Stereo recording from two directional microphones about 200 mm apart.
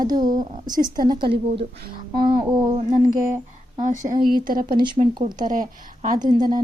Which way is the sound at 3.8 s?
40° right (ahead or behind).